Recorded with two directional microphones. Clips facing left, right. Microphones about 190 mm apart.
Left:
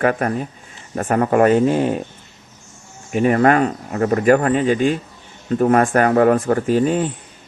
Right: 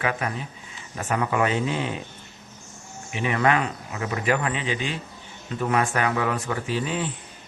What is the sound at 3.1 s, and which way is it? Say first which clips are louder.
Speech: left 8 dB; 45° left (ahead or behind).